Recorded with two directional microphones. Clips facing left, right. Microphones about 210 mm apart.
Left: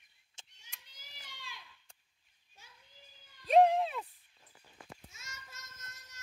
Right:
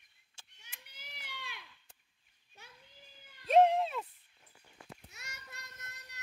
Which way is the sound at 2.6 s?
60° right (ahead or behind).